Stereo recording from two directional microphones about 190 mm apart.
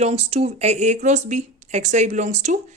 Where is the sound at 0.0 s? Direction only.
35° right (ahead or behind).